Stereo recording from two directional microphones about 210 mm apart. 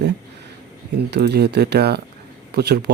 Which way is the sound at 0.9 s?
50° right (ahead or behind).